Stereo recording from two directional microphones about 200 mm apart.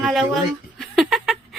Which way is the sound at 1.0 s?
Centre (ahead or behind).